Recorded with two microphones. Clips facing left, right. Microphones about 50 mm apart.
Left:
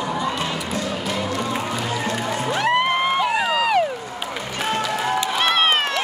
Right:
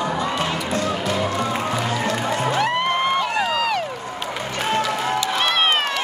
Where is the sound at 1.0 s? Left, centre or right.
Right.